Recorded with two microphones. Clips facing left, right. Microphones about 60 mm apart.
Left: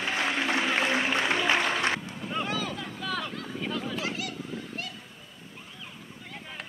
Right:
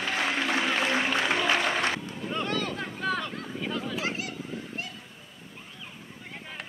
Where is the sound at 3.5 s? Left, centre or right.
Centre.